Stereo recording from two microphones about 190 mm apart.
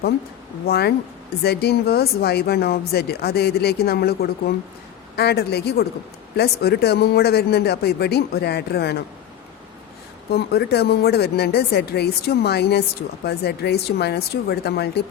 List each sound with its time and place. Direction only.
0.6 s speech: 55° left (ahead or behind)
10.3 s speech: 55° left (ahead or behind)